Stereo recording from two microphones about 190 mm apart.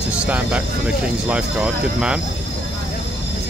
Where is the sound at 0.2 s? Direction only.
5° right (ahead or behind).